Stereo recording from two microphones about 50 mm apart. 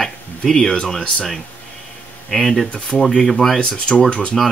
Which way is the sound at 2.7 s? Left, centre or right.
Centre.